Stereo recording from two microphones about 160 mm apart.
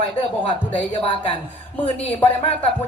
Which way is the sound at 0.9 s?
30° left (ahead or behind).